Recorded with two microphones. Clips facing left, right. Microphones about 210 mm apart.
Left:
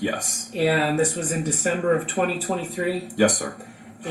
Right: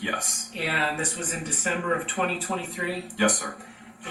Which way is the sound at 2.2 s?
45° left (ahead or behind).